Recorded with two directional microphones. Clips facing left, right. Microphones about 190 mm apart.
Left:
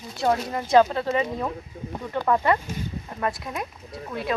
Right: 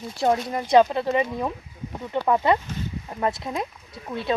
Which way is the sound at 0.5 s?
15° right (ahead or behind).